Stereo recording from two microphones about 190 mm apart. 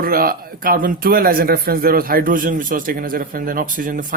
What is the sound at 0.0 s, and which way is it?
A man's voice, 50° right (ahead or behind).